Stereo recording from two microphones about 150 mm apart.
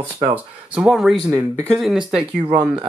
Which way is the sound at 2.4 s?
35° right (ahead or behind).